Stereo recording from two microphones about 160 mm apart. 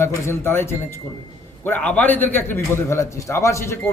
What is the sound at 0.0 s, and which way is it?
A man's voice, 15° left (ahead or behind).